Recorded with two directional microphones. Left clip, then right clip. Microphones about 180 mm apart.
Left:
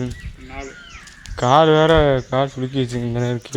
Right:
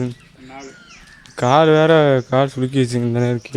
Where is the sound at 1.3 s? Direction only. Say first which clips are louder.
Even; 30° right (ahead or behind).